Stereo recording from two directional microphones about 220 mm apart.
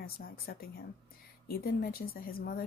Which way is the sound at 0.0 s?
45° left (ahead or behind).